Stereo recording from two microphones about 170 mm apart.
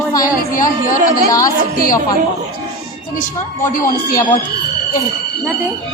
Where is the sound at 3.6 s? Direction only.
50° left (ahead or behind).